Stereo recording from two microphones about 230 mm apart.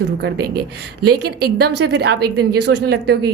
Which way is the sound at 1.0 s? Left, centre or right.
Right.